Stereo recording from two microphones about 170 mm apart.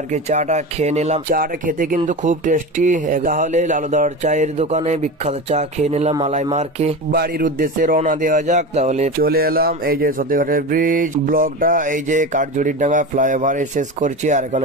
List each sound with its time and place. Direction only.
0.1 s speech: 45° right (ahead or behind)
1.3 s speech: 55° right (ahead or behind); by 7.0 s 40° right (ahead or behind)
7.1 s speech: 60° right (ahead or behind); by 9.1 s 40° right (ahead or behind)
9.2 s speech: 60° right (ahead or behind)